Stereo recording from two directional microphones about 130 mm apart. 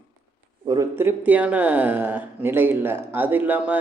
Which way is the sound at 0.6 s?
30° right (ahead or behind).